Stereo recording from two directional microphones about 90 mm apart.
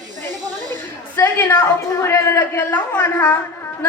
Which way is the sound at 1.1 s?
25° left (ahead or behind).